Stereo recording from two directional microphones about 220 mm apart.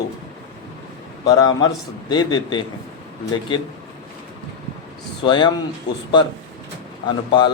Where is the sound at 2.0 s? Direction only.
20° left (ahead or behind).